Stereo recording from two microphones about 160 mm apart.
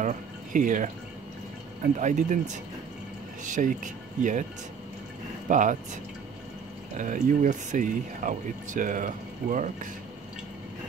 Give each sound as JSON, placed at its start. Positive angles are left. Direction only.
{"t": 0.0, "sound": "speech", "side_deg": -55}
{"t": 2.0, "sound": "speech", "side_deg": -50}
{"t": 5.5, "sound": "speech", "side_deg": -55}
{"t": 7.0, "sound": "speech", "side_deg": -55}